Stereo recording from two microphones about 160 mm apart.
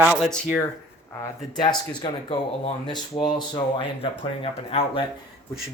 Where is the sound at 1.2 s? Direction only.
30° left (ahead or behind).